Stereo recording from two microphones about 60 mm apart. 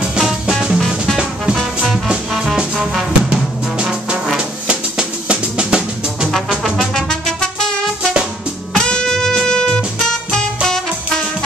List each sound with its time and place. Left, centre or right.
0.2 s music: centre
6.9 s music: centre